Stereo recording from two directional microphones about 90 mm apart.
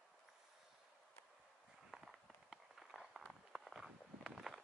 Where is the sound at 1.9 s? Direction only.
5° right (ahead or behind).